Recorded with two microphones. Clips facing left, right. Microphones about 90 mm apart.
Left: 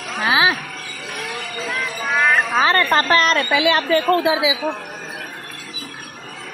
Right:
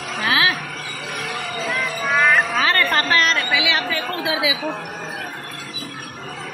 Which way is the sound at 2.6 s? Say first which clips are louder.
Left 3 dB; 30° left (ahead or behind).